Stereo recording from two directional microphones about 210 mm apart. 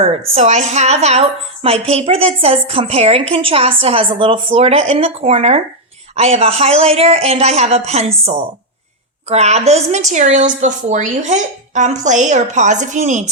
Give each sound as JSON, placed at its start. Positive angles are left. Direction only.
{"t": 0.3, "sound": "a woman's voice", "side_deg": -35}